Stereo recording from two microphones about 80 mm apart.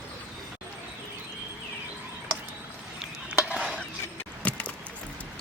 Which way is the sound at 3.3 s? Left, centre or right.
Centre.